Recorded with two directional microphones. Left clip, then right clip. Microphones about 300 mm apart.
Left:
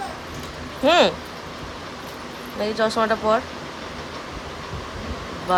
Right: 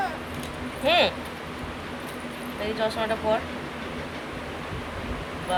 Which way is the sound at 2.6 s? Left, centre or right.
Centre.